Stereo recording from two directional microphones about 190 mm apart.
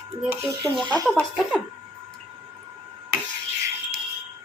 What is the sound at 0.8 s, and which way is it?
Speech, 20° right (ahead or behind).